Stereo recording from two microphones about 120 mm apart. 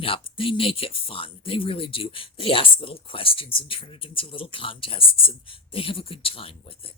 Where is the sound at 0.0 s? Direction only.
50° left (ahead or behind).